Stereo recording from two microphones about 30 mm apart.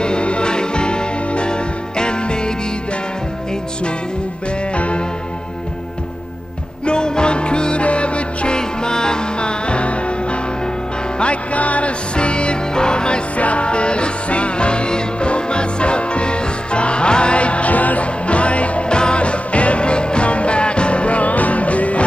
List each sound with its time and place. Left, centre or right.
0.0 s music: left
4.7 s music: left
6.9 s music: left
8.5 s music: left
11.5 s music: left
12.2 s music: left
13.4 s music: left
18.9 s music: left